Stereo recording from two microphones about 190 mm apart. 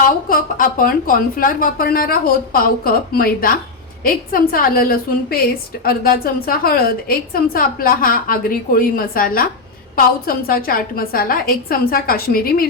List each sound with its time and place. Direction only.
0.0 s a woman's voice: 50° left (ahead or behind)